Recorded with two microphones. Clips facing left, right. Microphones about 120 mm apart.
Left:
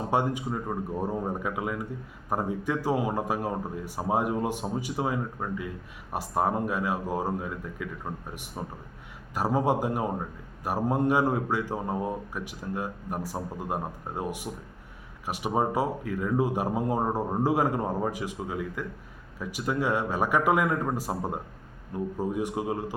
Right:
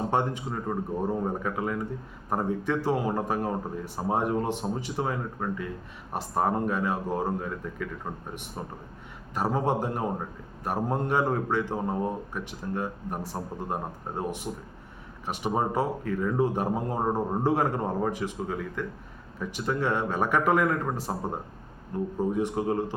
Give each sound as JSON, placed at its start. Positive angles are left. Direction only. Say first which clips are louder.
{"t": 0.1, "sound": "speech", "louder": "left 1 dB", "side_deg": 10}